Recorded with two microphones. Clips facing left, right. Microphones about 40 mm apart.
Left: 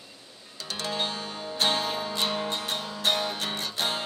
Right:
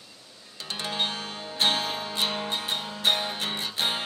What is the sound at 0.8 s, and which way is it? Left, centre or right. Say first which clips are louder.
Music: right 1 dB; centre.